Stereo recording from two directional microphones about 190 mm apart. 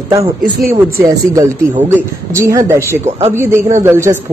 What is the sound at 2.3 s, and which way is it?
A woman's voice, 15° right (ahead or behind).